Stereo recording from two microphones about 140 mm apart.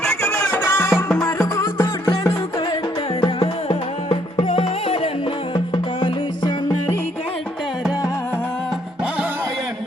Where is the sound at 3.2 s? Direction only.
40° left (ahead or behind).